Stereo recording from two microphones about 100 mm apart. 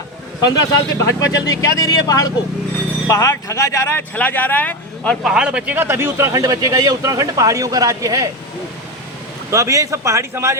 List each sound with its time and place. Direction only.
0.4 s speech: 40° left (ahead or behind)
4.1 s speech: 15° left (ahead or behind)
5.2 s speech: 10° right (ahead or behind); by 8.3 s 35° right (ahead or behind)
9.5 s speech: 30° right (ahead or behind)